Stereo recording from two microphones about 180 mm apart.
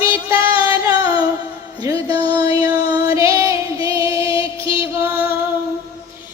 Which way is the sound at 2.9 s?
20° right (ahead or behind).